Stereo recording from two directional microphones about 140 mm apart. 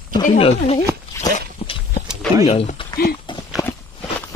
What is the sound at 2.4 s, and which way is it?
Speech, 45° left (ahead or behind).